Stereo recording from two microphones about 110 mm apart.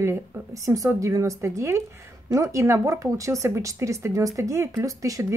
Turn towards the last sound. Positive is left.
turn(degrees=-30)  # may be behind; listen again after turning